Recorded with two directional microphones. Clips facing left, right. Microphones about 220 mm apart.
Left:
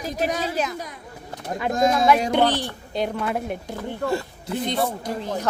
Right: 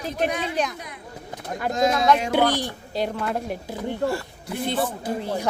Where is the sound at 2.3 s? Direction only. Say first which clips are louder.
Left 1 dB; 10° right (ahead or behind).